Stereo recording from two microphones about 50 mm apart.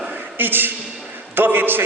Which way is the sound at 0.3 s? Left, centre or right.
Right.